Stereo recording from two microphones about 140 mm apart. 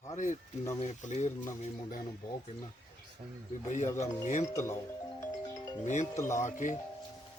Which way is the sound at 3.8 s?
20° left (ahead or behind).